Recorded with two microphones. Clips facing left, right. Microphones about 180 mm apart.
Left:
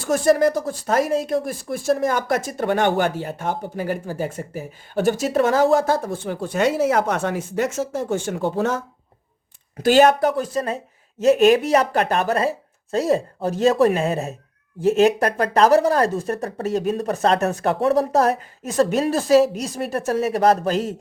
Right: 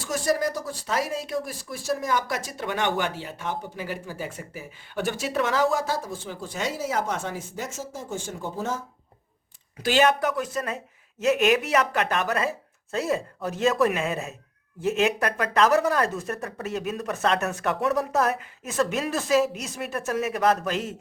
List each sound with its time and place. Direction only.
0.0 s speech: 55° left (ahead or behind); by 8.8 s 75° left (ahead or behind)
9.8 s speech: 45° left (ahead or behind)